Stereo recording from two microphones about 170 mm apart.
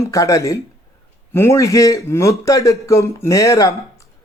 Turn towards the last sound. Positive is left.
turn(degrees=20)  # may be behind; listen again after turning